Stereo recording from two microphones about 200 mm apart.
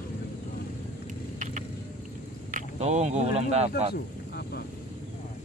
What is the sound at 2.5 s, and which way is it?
Speech, 35° right (ahead or behind).